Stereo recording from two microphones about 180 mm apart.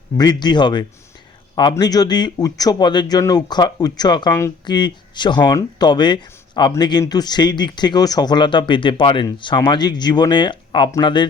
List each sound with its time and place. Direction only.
0.2 s a man's voice: 25° left (ahead or behind)